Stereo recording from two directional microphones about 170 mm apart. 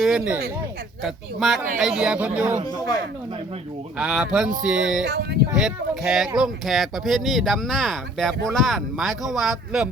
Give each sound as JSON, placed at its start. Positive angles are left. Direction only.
{"t": 0.0, "sound": "speech", "side_deg": -5}
{"t": 2.7, "sound": "speech", "side_deg": 20}
{"t": 3.9, "sound": "speech", "side_deg": -5}
{"t": 5.0, "sound": "speech", "side_deg": -75}
{"t": 5.5, "sound": "speech", "side_deg": -5}